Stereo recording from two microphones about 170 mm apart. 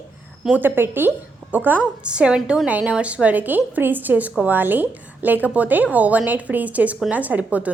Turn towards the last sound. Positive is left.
turn(degrees=-10)  # may be behind; listen again after turning